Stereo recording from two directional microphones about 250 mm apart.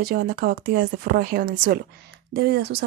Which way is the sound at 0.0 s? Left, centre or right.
Right.